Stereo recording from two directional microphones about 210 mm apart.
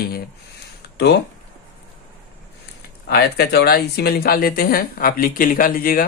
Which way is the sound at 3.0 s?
50° left (ahead or behind).